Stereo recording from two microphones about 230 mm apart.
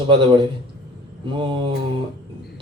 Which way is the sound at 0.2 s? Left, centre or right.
Right.